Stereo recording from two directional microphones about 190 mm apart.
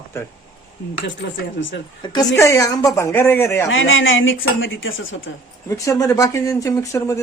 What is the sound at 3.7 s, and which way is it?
Speech, 90° left.